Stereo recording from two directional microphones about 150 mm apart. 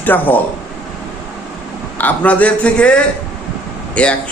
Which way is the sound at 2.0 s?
10° left (ahead or behind).